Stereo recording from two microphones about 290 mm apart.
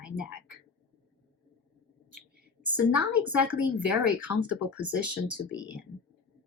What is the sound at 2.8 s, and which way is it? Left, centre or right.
Speech, centre.